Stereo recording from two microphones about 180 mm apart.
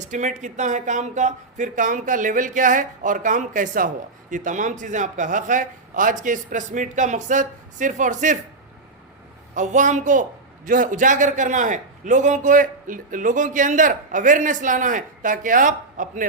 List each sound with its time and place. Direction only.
0.0 s speech: 40° right (ahead or behind)
9.6 s speech: 45° right (ahead or behind)